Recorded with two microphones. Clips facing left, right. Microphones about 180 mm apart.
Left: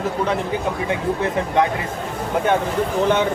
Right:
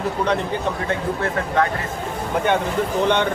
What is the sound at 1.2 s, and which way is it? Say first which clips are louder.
Speech: left 2 dB; 15° left (ahead or behind).